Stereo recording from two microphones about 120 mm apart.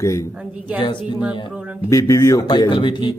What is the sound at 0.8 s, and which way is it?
Speech, 40° left (ahead or behind).